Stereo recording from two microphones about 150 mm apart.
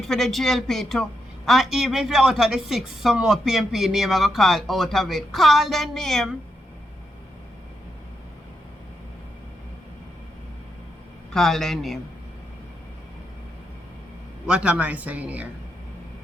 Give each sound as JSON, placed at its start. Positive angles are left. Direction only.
{"t": 0.0, "sound": "a woman's voice", "side_deg": 0}
{"t": 11.3, "sound": "a woman's voice", "side_deg": 0}
{"t": 14.4, "sound": "speech", "side_deg": -5}